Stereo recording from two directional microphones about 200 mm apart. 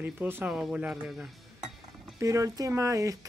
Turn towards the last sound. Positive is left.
turn(degrees=-15)  # may be behind; listen again after turning